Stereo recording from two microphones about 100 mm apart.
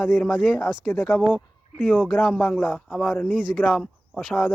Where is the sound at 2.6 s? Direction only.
15° left (ahead or behind).